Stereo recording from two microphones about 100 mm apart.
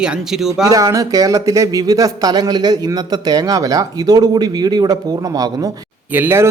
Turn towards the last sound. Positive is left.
turn(degrees=-20)  # may be behind; listen again after turning